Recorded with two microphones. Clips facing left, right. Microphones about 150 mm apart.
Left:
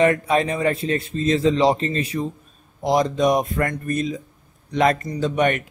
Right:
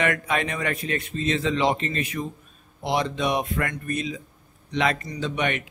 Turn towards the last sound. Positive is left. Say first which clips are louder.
# left 6 dB
turn(degrees=45)  # may be behind; listen again after turning